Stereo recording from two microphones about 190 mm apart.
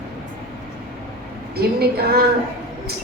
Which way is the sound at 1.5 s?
55° right (ahead or behind).